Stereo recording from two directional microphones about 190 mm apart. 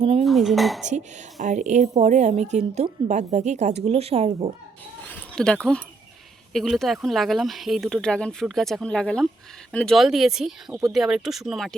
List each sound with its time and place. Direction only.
0.0 s dishes: 30° right (ahead or behind)
0.3 s dishes: centre (ahead or behind)
0.9 s a woman's voice: 40° right (ahead or behind)
5.0 s a sound: 5° left (ahead or behind)
6.5 s speech: centre (ahead or behind)